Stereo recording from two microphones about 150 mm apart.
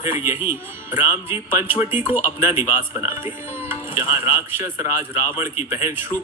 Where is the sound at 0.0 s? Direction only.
15° right (ahead or behind).